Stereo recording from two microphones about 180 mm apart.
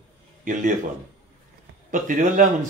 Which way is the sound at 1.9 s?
45° right (ahead or behind).